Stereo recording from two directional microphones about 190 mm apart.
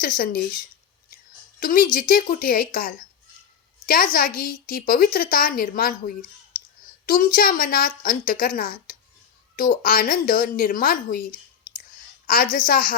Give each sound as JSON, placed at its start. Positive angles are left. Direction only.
{"t": 0.0, "sound": "a woman's voice", "side_deg": 50}
{"t": 1.5, "sound": "a woman's voice", "side_deg": 45}